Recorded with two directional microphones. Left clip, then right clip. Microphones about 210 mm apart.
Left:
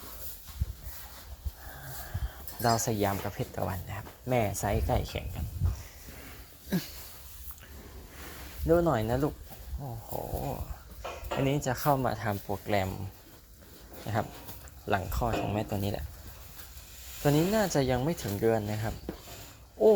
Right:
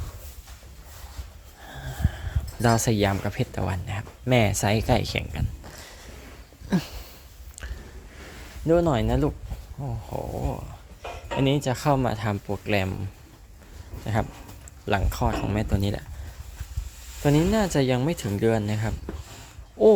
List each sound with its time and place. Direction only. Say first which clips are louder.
1.6 s speech: right 8 dB; 45° right (ahead or behind)
6.7 s a sound: right 6 dB; 20° right (ahead or behind)
8.6 s speech: right 4 dB; 40° right (ahead or behind)
14.8 s speech: right 4 dB; 30° right (ahead or behind)
17.2 s speech: right 4 dB; 25° right (ahead or behind)